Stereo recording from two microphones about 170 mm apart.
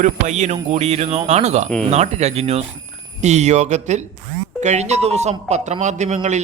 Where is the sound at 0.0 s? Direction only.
45° right (ahead or behind).